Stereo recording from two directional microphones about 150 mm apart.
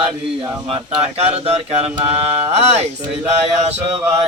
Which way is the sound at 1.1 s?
45° right (ahead or behind).